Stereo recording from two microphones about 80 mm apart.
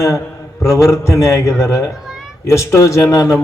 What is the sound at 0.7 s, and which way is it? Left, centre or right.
Speech, left.